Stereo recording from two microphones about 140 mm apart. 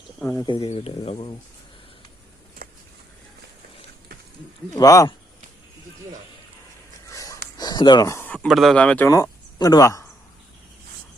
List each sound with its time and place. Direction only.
0.3 s speech: 30° left (ahead or behind)
2.6 s a sound: 90° right
4.7 s speech: 25° left (ahead or behind)
7.1 s a sound: 25° left (ahead or behind)
8.4 s speech: centre (ahead or behind)
9.0 s speech: 25° left (ahead or behind)